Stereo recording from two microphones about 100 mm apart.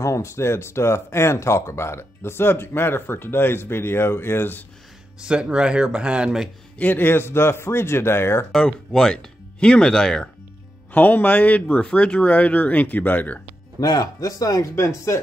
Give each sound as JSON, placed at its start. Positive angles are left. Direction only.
{"t": 0.0, "sound": "speech", "side_deg": 30}
{"t": 5.2, "sound": "speech", "side_deg": -10}
{"t": 6.8, "sound": "speech", "side_deg": 20}
{"t": 8.5, "sound": "speech", "side_deg": 10}
{"t": 10.9, "sound": "speech", "side_deg": 15}
{"t": 13.7, "sound": "speech", "side_deg": 40}